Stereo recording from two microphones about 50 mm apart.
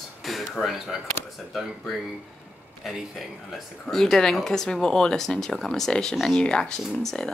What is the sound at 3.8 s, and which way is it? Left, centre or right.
Speech, centre.